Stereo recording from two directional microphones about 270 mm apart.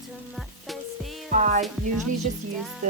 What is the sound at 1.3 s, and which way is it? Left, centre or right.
Music, right.